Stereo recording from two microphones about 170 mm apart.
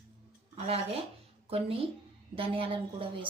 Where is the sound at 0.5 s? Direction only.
35° right (ahead or behind).